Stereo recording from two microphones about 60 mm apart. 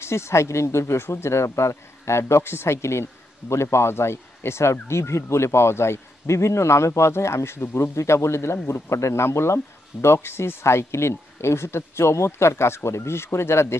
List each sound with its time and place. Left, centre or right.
0.0 s speech: left